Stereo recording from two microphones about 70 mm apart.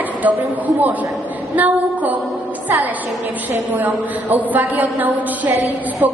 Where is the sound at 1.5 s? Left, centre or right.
Right.